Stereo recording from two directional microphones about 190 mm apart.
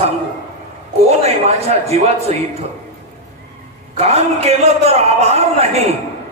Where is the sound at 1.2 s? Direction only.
35° right (ahead or behind).